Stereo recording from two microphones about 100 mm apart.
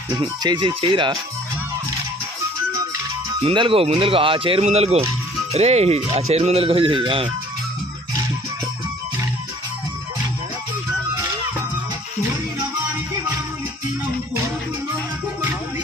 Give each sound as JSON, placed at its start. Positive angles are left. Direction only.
{"t": 0.1, "sound": "speech", "side_deg": -45}
{"t": 3.4, "sound": "speech", "side_deg": -60}